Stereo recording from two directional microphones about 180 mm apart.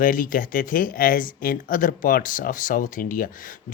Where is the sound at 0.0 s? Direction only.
50° left (ahead or behind).